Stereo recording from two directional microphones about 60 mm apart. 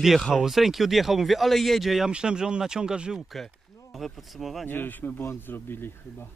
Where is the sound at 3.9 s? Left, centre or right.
Centre.